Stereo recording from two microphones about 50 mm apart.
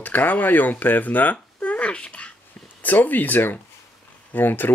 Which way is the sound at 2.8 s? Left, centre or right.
Left.